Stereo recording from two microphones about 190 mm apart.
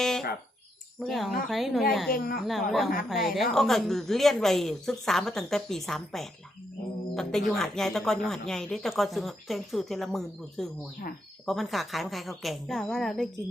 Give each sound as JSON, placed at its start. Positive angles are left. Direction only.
{"t": 0.0, "sound": "a sound", "side_deg": 0}
{"t": 0.9, "sound": "speech", "side_deg": 0}
{"t": 2.1, "sound": "speech", "side_deg": 50}
{"t": 2.4, "sound": "speech", "side_deg": 0}